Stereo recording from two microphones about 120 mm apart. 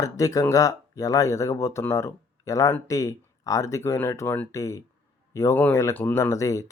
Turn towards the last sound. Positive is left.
turn(degrees=25)  # may be behind; listen again after turning